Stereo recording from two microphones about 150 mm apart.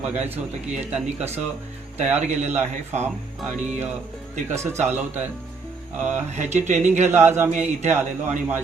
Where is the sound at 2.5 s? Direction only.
15° right (ahead or behind).